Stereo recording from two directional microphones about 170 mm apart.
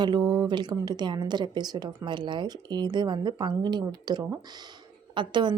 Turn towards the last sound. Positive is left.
turn(degrees=-30)  # may be behind; listen again after turning